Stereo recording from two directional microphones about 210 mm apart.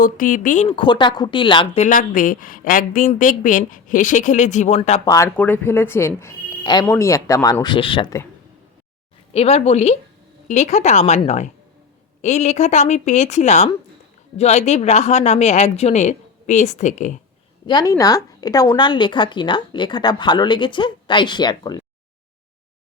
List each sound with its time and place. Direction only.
0.0 s a woman's voice: 40° left (ahead or behind)
5.0 s speech: 15° left (ahead or behind)
9.3 s a woman's voice: 30° left (ahead or behind)
17.7 s speech: 20° left (ahead or behind)